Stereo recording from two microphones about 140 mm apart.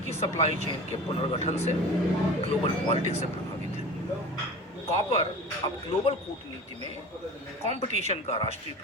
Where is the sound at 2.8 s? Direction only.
45° left (ahead or behind).